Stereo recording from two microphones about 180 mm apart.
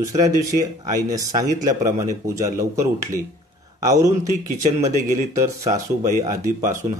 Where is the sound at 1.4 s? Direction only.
45° right (ahead or behind).